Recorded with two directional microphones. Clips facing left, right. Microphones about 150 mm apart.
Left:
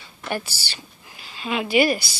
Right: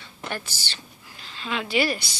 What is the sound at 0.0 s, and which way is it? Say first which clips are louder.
Speech: left 5 dB; 10° left (ahead or behind).